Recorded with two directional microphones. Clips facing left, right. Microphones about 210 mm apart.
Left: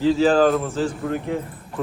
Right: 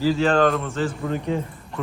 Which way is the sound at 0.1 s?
Centre (ahead or behind).